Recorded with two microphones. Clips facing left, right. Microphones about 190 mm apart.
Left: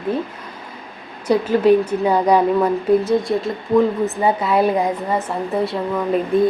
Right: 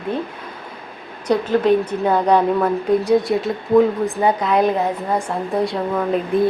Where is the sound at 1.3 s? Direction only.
10° left (ahead or behind).